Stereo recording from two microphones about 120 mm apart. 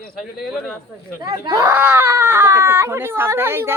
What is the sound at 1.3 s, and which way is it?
Speech, 25° right (ahead or behind).